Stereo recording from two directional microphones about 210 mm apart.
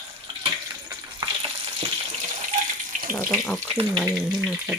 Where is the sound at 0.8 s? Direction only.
20° right (ahead or behind).